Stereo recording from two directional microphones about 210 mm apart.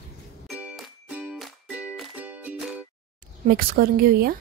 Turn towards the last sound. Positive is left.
turn(degrees=-45)  # may be behind; listen again after turning